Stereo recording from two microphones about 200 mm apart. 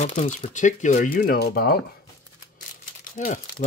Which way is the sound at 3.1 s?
45° left (ahead or behind).